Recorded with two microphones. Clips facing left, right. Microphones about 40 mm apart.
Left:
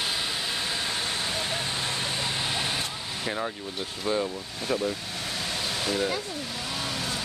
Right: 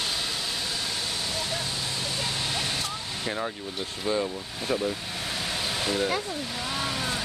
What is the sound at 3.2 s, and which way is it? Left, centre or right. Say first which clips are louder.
Speech: left 1 dB; centre.